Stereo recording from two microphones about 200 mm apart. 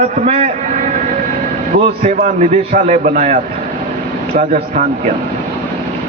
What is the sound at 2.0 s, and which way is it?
A man's voice, 35° right (ahead or behind).